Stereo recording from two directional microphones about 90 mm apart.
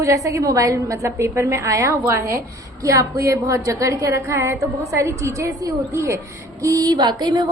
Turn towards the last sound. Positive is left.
turn(degrees=-55)  # may be behind; listen again after turning